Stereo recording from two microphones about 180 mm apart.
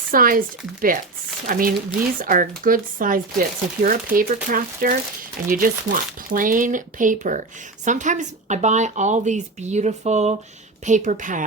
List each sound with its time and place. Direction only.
0.1 s speech: 50° right (ahead or behind)